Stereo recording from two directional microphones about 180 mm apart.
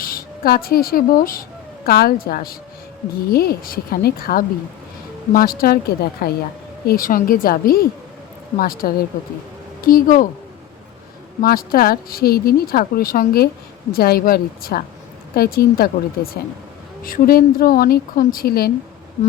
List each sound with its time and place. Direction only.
0.0 s a woman's voice: 55° left (ahead or behind)
11.3 s speech: 55° left (ahead or behind)